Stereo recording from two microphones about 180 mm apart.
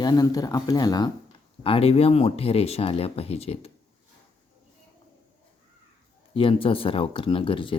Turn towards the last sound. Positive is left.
turn(degrees=30)  # may be behind; listen again after turning